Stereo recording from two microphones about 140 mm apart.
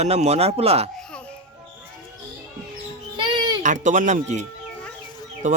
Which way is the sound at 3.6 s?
65° right (ahead or behind).